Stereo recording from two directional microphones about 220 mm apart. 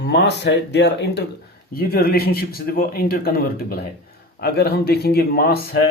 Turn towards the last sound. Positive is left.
turn(degrees=45)  # may be behind; listen again after turning